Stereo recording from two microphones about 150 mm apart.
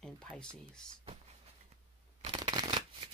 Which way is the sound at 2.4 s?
30° right (ahead or behind).